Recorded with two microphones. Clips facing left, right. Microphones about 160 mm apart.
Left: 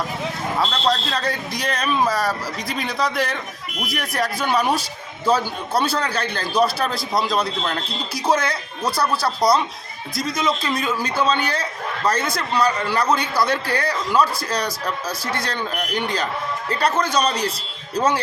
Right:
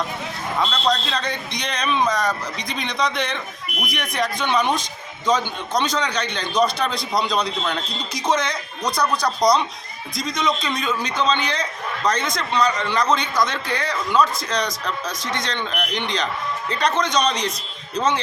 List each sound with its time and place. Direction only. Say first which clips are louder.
0.6 s a man's voice: even; 5° left (ahead or behind)